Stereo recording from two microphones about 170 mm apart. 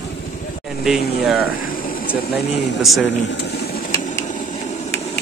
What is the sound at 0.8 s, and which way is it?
Speech, 5° right (ahead or behind).